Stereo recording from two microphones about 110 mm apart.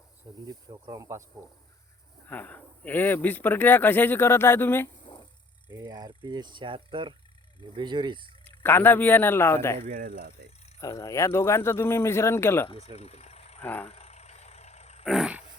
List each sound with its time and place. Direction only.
0.4 s speech: 35° right (ahead or behind)
2.2 s speech: 15° left (ahead or behind)
5.0 s a sound: 45° left (ahead or behind)
5.7 s speech: 35° right (ahead or behind)
8.4 s speech: 20° left (ahead or behind)
10.8 s speech: 25° left (ahead or behind)
12.6 s speech: 60° left (ahead or behind)
13.6 s vehicle: 15° left (ahead or behind)
13.8 s vehicle: 70° left (ahead or behind)
15.0 s roar: 5° right (ahead or behind)